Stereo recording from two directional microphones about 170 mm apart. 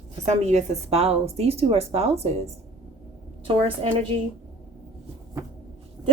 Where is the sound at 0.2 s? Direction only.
40° right (ahead or behind).